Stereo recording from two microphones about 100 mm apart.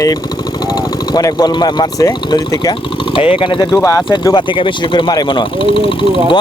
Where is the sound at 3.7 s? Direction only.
30° left (ahead or behind).